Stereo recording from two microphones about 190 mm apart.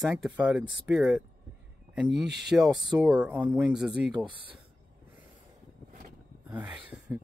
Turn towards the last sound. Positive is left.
turn(degrees=-5)  # may be behind; listen again after turning